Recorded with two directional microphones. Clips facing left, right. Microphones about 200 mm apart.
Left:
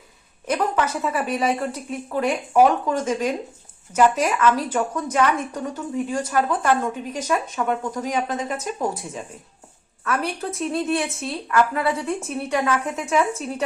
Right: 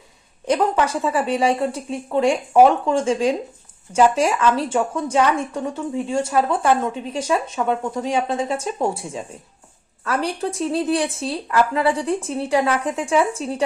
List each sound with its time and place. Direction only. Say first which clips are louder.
0.4 s a woman's voice: right 4 dB; 30° right (ahead or behind)